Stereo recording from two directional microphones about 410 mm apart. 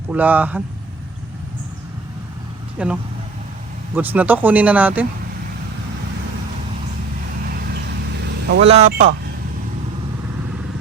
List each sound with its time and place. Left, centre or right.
0.1 s speech: centre
2.7 s speech: centre
7.4 s vehicle: right
8.2 s speech: right